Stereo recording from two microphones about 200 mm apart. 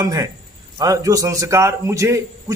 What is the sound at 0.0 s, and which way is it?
A man's voice, 20° right (ahead or behind).